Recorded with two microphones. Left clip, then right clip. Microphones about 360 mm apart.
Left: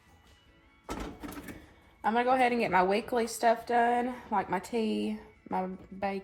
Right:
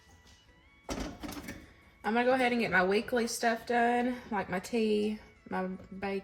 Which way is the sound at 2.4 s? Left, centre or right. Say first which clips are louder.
Left 2 dB; centre.